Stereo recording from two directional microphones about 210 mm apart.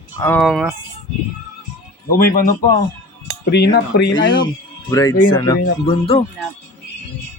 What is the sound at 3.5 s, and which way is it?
Speech, 50° left (ahead or behind).